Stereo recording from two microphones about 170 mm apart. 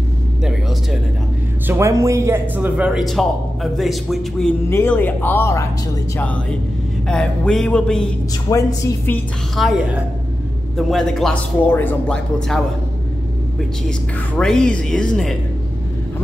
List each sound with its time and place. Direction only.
1.7 s a man's voice: 15° right (ahead or behind); by 4.6 s centre (ahead or behind)
4.6 s a man's voice: 10° left (ahead or behind)
8.5 s speech: 15° left (ahead or behind)
9.6 s a man's voice: centre (ahead or behind)
13.8 s a man's voice: 5° left (ahead or behind)